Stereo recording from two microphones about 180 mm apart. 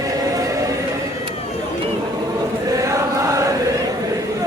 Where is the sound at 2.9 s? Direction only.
15° right (ahead or behind).